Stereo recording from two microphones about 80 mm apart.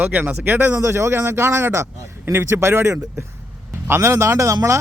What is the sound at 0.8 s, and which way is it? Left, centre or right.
Speech, right.